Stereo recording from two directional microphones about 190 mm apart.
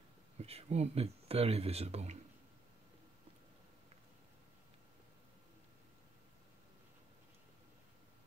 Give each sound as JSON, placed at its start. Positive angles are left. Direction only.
{"t": 0.4, "sound": "speech", "side_deg": -35}